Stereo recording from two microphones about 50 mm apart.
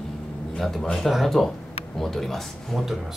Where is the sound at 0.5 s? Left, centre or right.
Centre.